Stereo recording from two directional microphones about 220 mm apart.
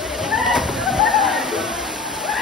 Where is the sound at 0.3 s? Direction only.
Centre (ahead or behind).